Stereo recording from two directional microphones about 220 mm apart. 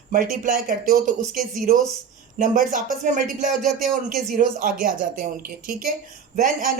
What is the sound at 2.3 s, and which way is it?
Speech, 35° right (ahead or behind).